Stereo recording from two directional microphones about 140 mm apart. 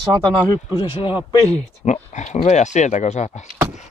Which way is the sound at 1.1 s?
20° right (ahead or behind).